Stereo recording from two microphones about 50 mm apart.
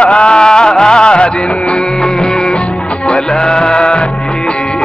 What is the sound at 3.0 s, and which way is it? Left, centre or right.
Music, centre.